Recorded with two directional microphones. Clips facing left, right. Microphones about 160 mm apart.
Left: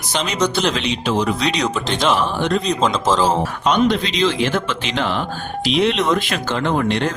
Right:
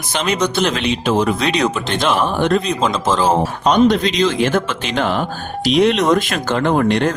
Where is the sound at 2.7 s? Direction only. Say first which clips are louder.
Even; 10° right (ahead or behind).